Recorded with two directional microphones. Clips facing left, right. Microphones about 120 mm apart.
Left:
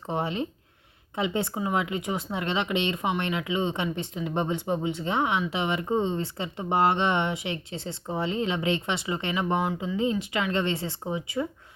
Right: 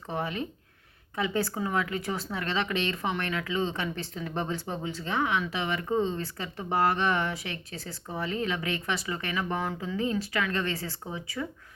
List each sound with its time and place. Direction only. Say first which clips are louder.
0.1 s speech: left 3 dB; 25° left (ahead or behind)